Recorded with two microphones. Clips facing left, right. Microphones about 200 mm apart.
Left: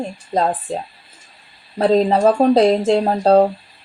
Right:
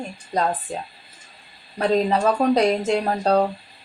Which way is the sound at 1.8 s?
30° left (ahead or behind).